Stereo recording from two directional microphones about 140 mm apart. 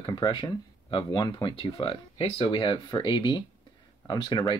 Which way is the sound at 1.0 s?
25° left (ahead or behind).